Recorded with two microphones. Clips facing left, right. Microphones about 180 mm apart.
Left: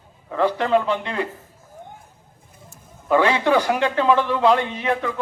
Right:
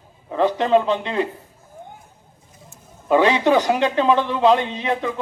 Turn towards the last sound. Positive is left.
turn(degrees=-20)  # may be behind; listen again after turning